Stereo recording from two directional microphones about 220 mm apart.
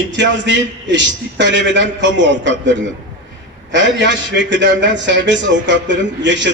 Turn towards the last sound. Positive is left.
turn(degrees=-55)  # may be behind; listen again after turning